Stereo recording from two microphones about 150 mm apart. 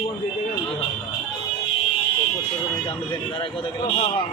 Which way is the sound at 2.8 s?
35° left (ahead or behind).